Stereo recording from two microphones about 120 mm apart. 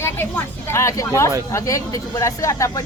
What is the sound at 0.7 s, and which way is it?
Speech, 25° left (ahead or behind).